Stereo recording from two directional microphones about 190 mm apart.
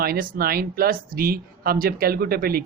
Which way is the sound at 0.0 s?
50° right (ahead or behind).